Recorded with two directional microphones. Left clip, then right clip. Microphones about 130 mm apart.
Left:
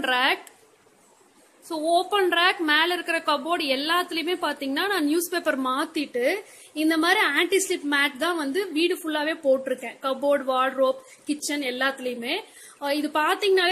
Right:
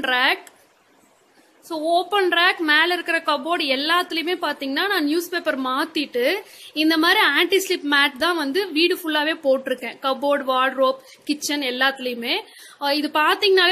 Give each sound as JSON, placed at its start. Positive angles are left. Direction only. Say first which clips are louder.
{"t": 0.0, "sound": "a woman's voice", "louder": "right 3 dB", "side_deg": 0}
{"t": 1.7, "sound": "a woman's voice", "louder": "right 2 dB", "side_deg": 0}